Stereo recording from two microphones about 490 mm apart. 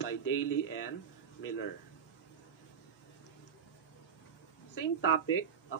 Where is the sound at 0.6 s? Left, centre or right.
Left.